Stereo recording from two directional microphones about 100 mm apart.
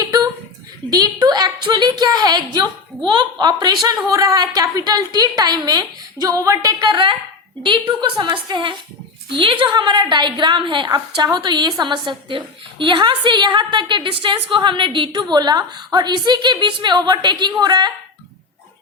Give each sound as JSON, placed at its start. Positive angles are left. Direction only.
{"t": 0.0, "sound": "a sound", "side_deg": -40}
{"t": 0.9, "sound": "a woman's voice", "side_deg": -40}
{"t": 6.7, "sound": "a woman's voice", "side_deg": -50}